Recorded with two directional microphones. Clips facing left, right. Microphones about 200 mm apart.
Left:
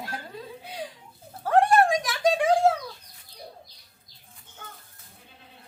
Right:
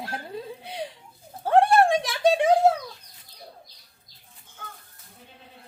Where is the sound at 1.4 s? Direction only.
25° right (ahead or behind).